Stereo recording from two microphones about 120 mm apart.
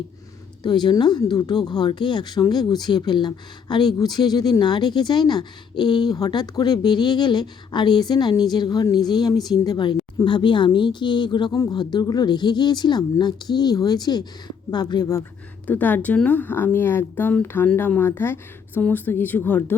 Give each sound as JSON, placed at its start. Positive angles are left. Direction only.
{"t": 0.6, "sound": "speech", "side_deg": 40}
{"t": 15.6, "sound": "speech", "side_deg": 15}